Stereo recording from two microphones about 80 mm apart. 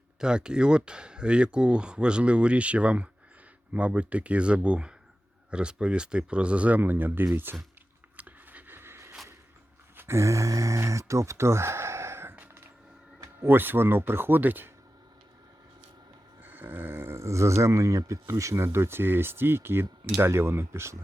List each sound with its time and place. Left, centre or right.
0.2 s speech: centre; by 7.6 s right
8.1 s a sound: right
13.4 s speech: right
16.4 s speech: right